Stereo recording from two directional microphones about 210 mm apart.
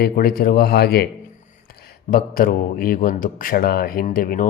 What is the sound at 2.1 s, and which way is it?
A man's voice, 45° left (ahead or behind).